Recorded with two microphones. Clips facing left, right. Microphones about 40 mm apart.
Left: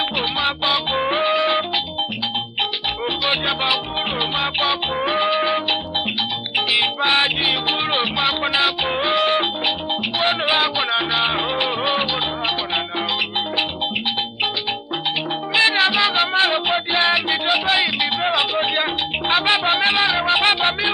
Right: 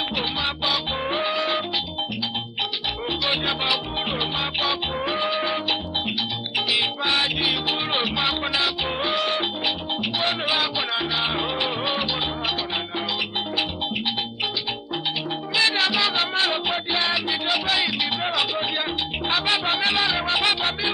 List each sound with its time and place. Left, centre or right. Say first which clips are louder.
0.4 s music: left 6 dB; left
3.3 s music: left 4 dB; left
7.9 s music: left 4 dB; left
15.5 s music: left 5 dB; left